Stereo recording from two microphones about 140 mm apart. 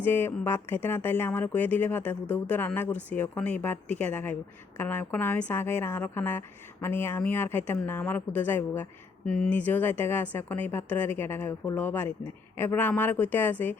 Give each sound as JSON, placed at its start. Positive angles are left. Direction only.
{"t": 0.0, "sound": "speech", "side_deg": 15}